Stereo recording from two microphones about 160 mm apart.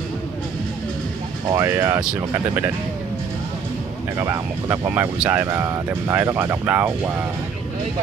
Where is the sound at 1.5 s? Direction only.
15° right (ahead or behind).